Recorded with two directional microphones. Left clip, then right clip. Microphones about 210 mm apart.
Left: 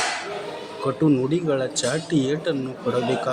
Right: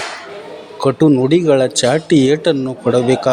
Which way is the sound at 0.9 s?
25° right (ahead or behind).